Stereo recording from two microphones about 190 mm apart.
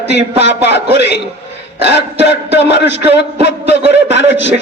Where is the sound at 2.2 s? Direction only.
65° left (ahead or behind).